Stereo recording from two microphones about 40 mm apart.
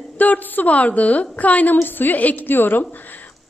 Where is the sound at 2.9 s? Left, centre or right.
Left.